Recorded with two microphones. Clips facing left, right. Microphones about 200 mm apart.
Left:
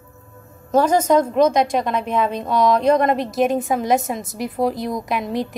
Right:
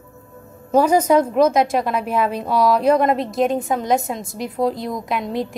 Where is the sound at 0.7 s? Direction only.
10° right (ahead or behind).